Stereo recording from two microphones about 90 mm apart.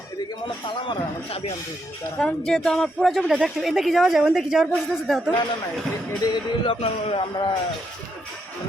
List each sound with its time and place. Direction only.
0.7 s speech: 70° left (ahead or behind)
2.1 s a woman's voice: 5° left (ahead or behind)
6.3 s speech: 75° left (ahead or behind)